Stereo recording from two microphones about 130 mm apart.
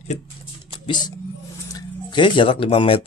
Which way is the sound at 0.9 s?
35° left (ahead or behind).